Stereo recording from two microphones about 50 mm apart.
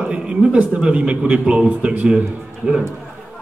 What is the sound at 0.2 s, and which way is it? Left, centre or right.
A man's voice, right.